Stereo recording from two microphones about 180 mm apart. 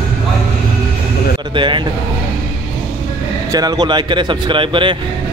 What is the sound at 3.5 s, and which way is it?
Speech, 20° right (ahead or behind).